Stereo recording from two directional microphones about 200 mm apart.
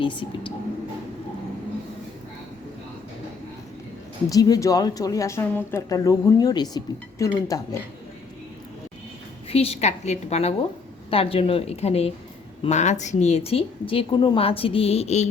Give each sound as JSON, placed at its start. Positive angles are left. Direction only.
{"t": 0.0, "sound": "a woman's voice", "side_deg": 25}
{"t": 4.3, "sound": "speech", "side_deg": 20}
{"t": 9.5, "sound": "a woman's voice", "side_deg": 30}